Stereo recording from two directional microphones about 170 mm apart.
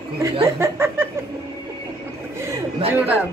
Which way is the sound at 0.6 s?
15° right (ahead or behind).